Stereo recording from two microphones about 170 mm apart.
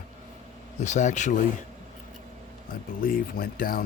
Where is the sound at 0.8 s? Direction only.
45° left (ahead or behind).